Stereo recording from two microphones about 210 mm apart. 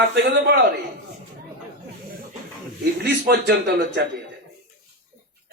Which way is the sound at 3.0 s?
50° right (ahead or behind).